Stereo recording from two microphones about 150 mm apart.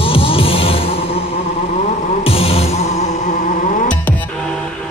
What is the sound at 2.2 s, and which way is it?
Music, 40° left (ahead or behind).